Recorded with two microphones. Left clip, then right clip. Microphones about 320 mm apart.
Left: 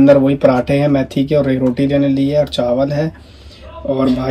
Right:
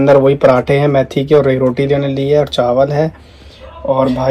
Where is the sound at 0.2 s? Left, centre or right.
Centre.